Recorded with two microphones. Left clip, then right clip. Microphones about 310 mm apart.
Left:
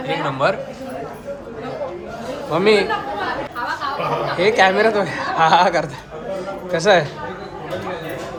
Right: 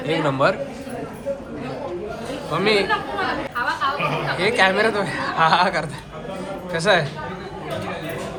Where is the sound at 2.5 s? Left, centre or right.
Centre.